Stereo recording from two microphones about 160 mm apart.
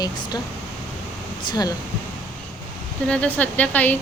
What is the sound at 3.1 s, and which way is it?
Speech, 10° left (ahead or behind).